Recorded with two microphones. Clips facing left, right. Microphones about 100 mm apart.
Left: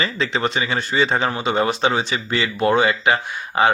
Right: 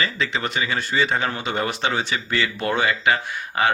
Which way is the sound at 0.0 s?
30° left (ahead or behind).